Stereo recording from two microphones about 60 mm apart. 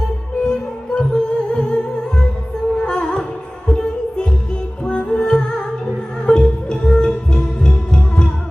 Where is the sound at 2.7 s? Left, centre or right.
Centre.